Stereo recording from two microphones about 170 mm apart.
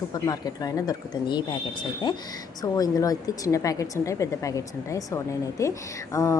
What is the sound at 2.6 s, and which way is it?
A woman's voice, 20° left (ahead or behind).